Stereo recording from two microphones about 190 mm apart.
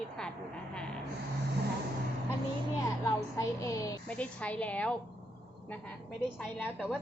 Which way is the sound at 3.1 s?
15° left (ahead or behind).